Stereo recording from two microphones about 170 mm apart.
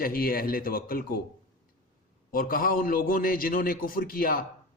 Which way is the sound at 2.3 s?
60° left (ahead or behind).